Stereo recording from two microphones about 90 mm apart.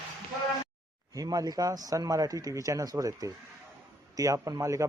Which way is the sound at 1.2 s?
45° right (ahead or behind).